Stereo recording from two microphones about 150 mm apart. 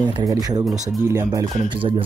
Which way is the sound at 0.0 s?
25° right (ahead or behind).